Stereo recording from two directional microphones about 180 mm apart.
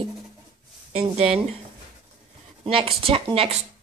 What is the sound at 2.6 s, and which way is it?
Speech, 30° right (ahead or behind).